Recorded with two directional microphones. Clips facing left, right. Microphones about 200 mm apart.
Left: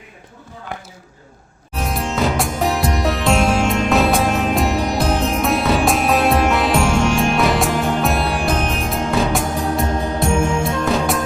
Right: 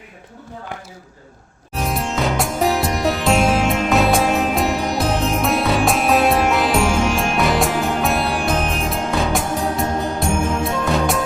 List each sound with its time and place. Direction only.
1.7 s music: centre (ahead or behind)